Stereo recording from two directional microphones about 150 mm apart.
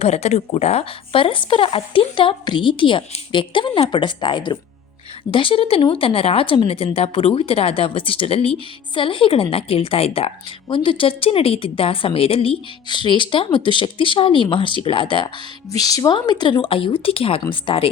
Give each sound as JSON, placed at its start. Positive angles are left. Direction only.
{"t": 0.0, "sound": "speech", "side_deg": 45}